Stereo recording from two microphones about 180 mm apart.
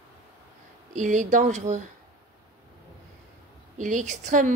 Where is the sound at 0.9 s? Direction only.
45° right (ahead or behind).